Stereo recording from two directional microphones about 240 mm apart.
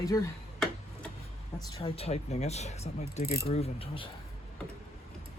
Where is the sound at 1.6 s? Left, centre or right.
Centre.